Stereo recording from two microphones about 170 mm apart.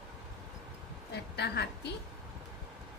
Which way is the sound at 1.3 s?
75° left (ahead or behind).